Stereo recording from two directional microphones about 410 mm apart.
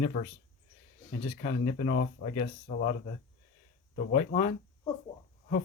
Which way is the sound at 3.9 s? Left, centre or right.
Centre.